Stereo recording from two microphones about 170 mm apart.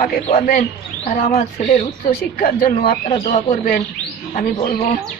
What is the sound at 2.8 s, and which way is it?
Speech, 35° left (ahead or behind).